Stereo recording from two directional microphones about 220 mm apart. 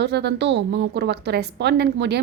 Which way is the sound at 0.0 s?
50° right (ahead or behind).